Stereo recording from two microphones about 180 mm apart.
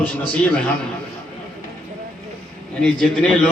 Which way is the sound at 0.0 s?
5° left (ahead or behind).